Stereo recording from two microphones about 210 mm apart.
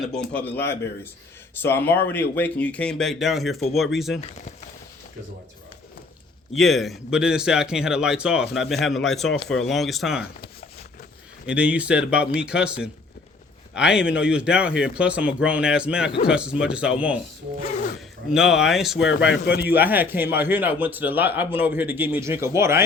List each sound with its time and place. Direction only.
0.5 s a man's voice: 10° left (ahead or behind)
6.5 s speech: centre (ahead or behind)
11.4 s speech: 5° right (ahead or behind)
18.3 s speech: 5° right (ahead or behind)
19.2 s speech: 50° left (ahead or behind)
19.6 s a man's voice: 10° right (ahead or behind)